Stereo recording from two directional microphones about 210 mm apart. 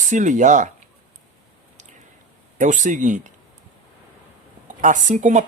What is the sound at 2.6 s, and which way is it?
Speech, 35° right (ahead or behind).